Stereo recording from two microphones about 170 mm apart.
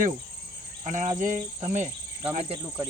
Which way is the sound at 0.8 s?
45° right (ahead or behind).